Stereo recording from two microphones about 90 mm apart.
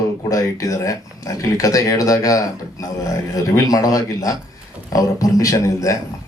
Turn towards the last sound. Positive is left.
turn(degrees=40)  # may be behind; listen again after turning